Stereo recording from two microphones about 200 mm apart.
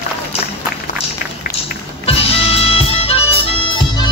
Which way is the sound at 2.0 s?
30° left (ahead or behind).